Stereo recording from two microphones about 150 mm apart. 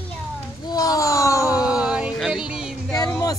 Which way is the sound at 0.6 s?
25° left (ahead or behind).